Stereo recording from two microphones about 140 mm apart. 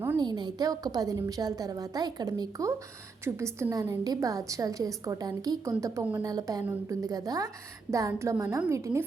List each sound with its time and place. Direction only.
0.2 s a woman's voice: 30° right (ahead or behind)